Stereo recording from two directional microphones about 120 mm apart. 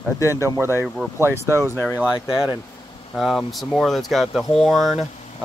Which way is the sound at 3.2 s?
Centre (ahead or behind).